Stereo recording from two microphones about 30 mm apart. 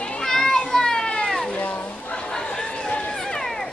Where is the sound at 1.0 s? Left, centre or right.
Left.